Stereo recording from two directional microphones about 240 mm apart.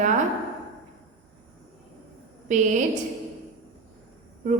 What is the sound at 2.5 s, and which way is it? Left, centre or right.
Speech, right.